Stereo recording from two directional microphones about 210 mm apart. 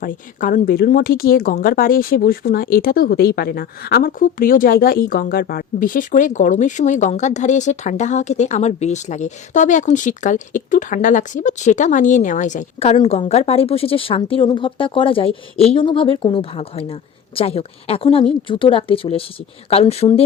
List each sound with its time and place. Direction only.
0.0 s speech: 40° left (ahead or behind)